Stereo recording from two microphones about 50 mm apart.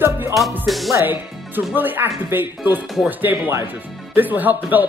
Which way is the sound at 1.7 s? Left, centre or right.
Right.